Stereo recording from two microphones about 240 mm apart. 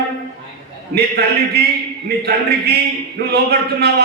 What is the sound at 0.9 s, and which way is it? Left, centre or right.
A man's voice, right.